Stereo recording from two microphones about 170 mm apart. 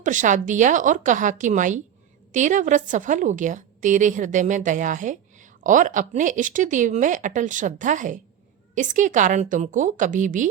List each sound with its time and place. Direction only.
0.0 s a woman's voice: 50° right (ahead or behind)